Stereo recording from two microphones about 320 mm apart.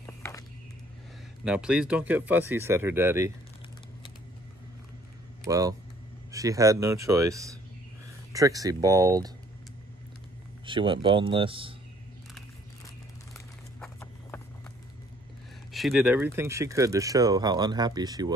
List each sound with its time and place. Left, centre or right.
0.0 s walk: centre
1.4 s speech: centre
5.5 s speech: centre
10.6 s speech: centre
13.7 s a sound: centre
15.7 s speech: centre